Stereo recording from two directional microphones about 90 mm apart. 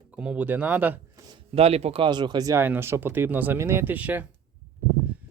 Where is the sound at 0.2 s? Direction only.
15° right (ahead or behind).